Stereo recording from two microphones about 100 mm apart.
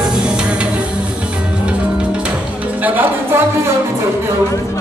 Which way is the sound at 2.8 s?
20° right (ahead or behind).